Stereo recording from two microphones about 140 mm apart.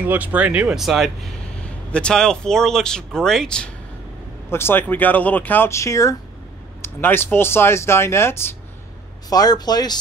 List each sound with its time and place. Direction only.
0.0 s speech: 10° right (ahead or behind); by 3.7 s 5° left (ahead or behind)
4.5 s speech: 15° left (ahead or behind)
9.3 s speech: 30° left (ahead or behind)